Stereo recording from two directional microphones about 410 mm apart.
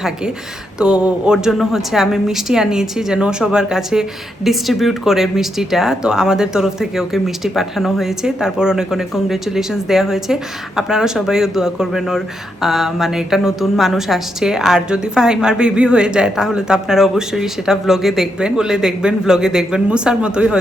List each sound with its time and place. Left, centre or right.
0.8 s a woman's voice: centre